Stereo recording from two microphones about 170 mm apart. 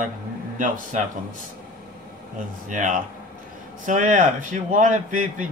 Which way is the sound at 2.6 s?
50° right (ahead or behind).